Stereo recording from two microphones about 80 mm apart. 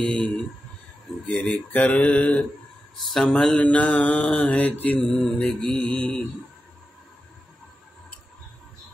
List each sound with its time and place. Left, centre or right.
0.0 s mantra: centre
3.0 s speech: centre
3.6 s mantra: centre
5.0 s mantra: centre